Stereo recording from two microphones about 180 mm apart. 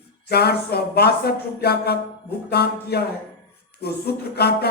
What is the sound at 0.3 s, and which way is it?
Speech, 65° left (ahead or behind).